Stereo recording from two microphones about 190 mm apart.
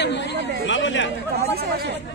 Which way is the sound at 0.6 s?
75° left (ahead or behind).